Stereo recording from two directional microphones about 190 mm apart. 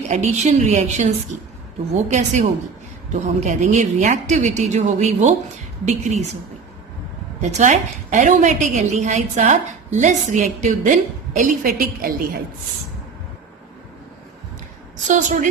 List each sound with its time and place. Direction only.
0.1 s a woman's voice: 35° right (ahead or behind)
7.4 s a woman's voice: 40° right (ahead or behind)
15.0 s a woman's voice: 40° right (ahead or behind)